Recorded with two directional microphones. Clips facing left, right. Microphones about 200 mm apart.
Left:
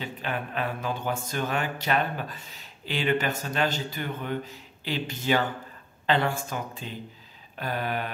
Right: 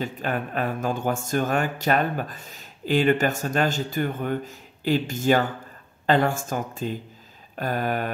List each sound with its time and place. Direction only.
0.0 s speech: 45° right (ahead or behind)